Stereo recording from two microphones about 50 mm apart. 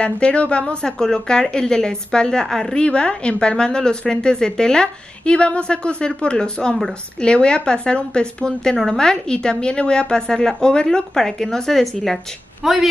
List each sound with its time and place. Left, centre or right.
0.0 s a woman's voice: left
2.8 s a woman's voice: left; by 12.8 s centre